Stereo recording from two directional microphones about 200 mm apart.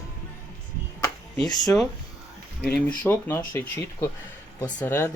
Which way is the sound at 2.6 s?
10° left (ahead or behind).